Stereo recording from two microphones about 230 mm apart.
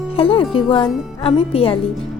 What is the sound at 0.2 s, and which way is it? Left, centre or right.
A woman's voice, left.